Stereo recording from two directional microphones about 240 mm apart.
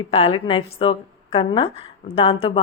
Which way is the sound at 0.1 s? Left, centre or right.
Left.